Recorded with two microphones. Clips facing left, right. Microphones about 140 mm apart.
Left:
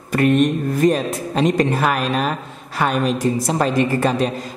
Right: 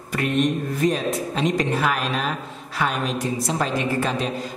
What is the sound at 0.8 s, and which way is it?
A woman's voice, 50° left (ahead or behind).